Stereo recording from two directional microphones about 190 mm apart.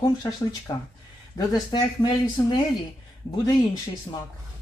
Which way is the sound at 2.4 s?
10° left (ahead or behind).